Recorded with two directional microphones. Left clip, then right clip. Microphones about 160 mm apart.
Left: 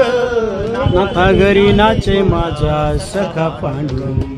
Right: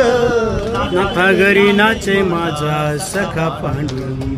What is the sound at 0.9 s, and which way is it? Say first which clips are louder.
Speech: left 1 dB; 20° left (ahead or behind).